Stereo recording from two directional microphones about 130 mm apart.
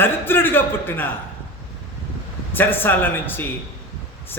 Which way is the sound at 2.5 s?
15° left (ahead or behind).